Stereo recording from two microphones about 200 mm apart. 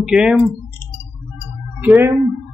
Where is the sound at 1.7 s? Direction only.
10° right (ahead or behind).